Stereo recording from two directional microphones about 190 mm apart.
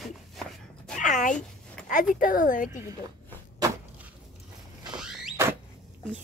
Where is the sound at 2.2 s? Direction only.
45° left (ahead or behind).